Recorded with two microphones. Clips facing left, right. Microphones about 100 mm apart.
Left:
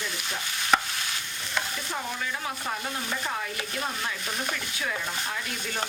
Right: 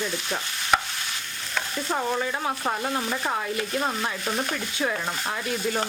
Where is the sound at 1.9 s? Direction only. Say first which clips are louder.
Right 9 dB; 50° right (ahead or behind).